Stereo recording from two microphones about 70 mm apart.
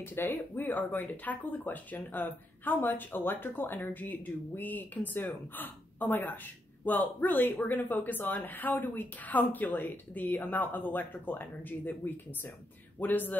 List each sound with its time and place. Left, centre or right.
0.0 s speech: left